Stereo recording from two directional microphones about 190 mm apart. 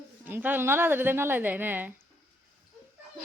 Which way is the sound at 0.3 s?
10° right (ahead or behind).